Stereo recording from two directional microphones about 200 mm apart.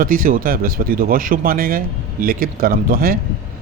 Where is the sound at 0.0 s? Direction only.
45° right (ahead or behind).